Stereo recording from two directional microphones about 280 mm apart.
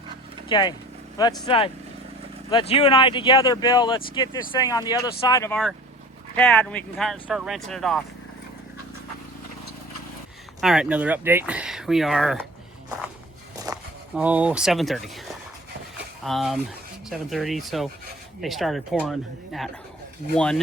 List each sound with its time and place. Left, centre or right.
0.4 s speech: centre
10.6 s speech: centre
13.7 s a sound: centre
14.2 s speech: centre
16.2 s speech: centre